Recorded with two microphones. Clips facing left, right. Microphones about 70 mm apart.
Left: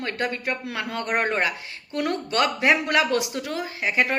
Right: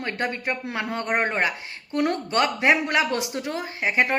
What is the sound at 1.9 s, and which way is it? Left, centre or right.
Speech, right.